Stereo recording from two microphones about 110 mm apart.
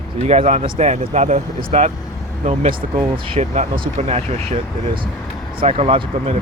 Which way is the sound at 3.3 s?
90° right.